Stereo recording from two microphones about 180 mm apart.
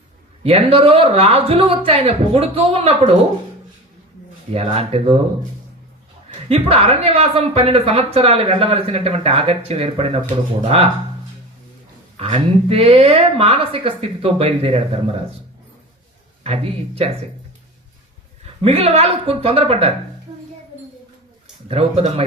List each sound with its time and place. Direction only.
0.4 s speech: 30° right (ahead or behind)
4.5 s speech: 35° right (ahead or behind)
6.5 s speech: 35° right (ahead or behind)
12.2 s speech: 35° right (ahead or behind)
16.4 s speech: 35° right (ahead or behind)
18.6 s speech: 35° right (ahead or behind)
21.7 s speech: 35° right (ahead or behind)